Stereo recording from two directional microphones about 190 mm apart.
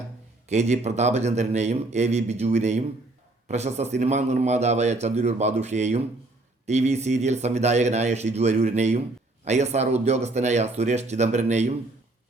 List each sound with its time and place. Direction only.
0.5 s speech: 35° right (ahead or behind)